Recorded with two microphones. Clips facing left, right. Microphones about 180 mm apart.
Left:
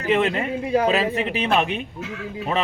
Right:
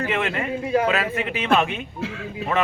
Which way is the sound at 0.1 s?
20° left (ahead or behind).